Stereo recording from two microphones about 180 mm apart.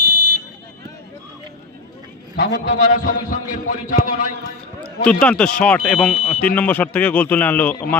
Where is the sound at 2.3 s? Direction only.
70° left (ahead or behind).